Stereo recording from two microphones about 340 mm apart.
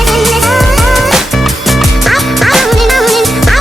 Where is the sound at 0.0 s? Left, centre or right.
Centre.